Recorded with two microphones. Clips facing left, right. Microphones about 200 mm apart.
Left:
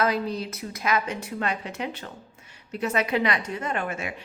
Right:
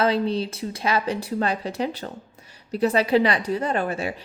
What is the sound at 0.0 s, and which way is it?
A woman's voice, 30° right (ahead or behind).